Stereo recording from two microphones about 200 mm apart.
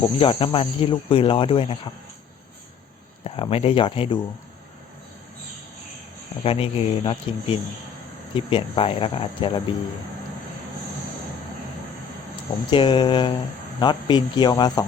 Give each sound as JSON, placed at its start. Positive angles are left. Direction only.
{"t": 0.2, "sound": "speech", "side_deg": 25}
{"t": 3.2, "sound": "speech", "side_deg": 30}
{"t": 6.4, "sound": "speech", "side_deg": 30}
{"t": 12.7, "sound": "speech", "side_deg": 25}